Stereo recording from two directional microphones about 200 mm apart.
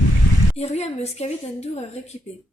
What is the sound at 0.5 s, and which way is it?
Speech, 35° left (ahead or behind).